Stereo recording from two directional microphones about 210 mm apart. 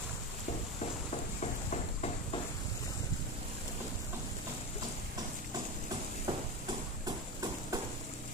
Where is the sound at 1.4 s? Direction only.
35° left (ahead or behind).